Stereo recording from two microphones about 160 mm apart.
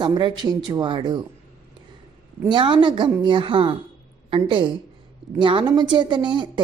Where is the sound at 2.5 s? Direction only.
30° right (ahead or behind).